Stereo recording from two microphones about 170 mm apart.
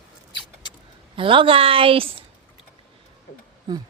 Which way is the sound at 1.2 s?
30° right (ahead or behind).